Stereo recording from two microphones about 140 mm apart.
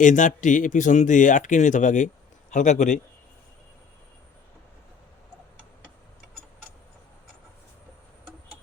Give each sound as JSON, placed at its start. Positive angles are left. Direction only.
{"t": 0.0, "sound": "speech", "side_deg": 65}